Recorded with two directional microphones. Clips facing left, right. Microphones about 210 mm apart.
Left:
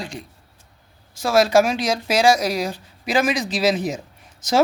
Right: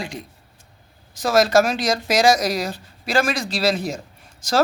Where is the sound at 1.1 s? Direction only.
10° left (ahead or behind).